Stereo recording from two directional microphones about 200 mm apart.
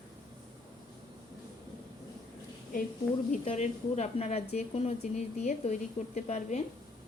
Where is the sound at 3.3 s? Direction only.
35° left (ahead or behind).